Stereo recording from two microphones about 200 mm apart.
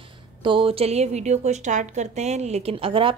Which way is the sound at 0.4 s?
25° right (ahead or behind).